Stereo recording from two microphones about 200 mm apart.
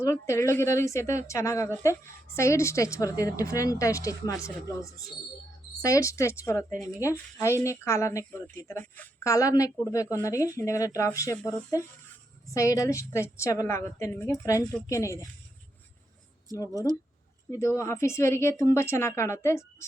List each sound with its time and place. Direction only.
0.0 s a woman's voice: 15° left (ahead or behind)
12.5 s a woman's voice: 15° left (ahead or behind)
17.6 s a woman's voice: 15° left (ahead or behind)